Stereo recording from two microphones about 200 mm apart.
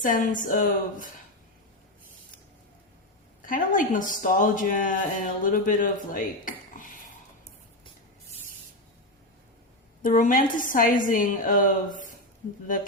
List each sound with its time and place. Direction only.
0.0 s speech: 40° left (ahead or behind)
3.4 s speech: 40° left (ahead or behind)
10.0 s a woman's voice: 40° left (ahead or behind)